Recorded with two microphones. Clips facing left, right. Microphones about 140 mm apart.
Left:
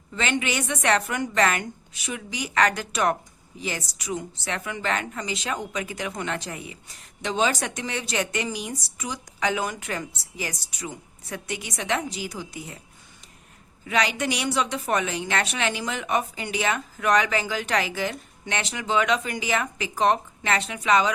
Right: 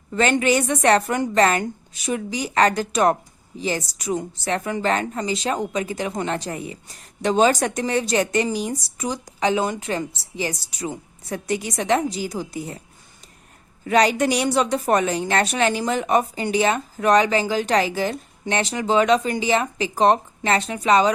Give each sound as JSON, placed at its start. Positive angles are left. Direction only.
{"t": 0.1, "sound": "a woman's voice", "side_deg": -45}
{"t": 13.8, "sound": "a woman's voice", "side_deg": -40}